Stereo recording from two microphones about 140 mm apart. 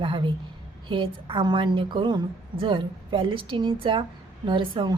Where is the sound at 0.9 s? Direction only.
35° right (ahead or behind).